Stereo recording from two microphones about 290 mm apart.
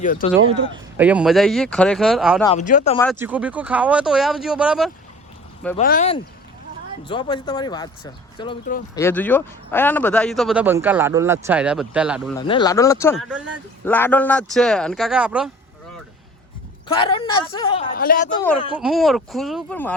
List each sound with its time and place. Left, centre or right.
0.0 s speech: left
0.7 s speech: centre
2.4 s speech: left
3.2 s speech: centre
5.7 s speech: left; by 12.3 s centre
12.4 s speech: centre
13.1 s speech: centre
16.9 s speech: centre
17.9 s speech: left
18.3 s speech: centre
18.8 s speech: centre